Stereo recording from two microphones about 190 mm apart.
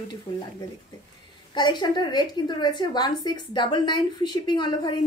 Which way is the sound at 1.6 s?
25° left (ahead or behind).